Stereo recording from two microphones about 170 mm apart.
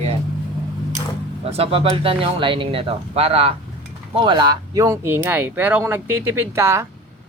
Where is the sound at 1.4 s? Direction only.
35° right (ahead or behind); by 6.9 s 15° right (ahead or behind).